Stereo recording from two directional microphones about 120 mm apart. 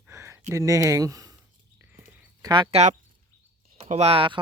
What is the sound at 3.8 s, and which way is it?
Speech, 65° right (ahead or behind).